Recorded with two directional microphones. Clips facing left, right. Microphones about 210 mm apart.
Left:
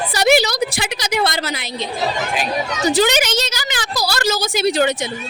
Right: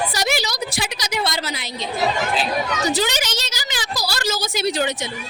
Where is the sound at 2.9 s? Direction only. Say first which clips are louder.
Left 7 dB; 55° left (ahead or behind).